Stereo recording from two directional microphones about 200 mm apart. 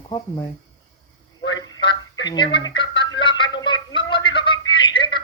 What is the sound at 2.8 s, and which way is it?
Music, 25° left (ahead or behind).